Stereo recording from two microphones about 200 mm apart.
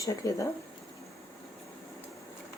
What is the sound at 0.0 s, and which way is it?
Speech, 15° left (ahead or behind).